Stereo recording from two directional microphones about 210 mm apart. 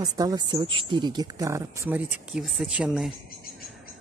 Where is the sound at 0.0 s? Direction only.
15° right (ahead or behind).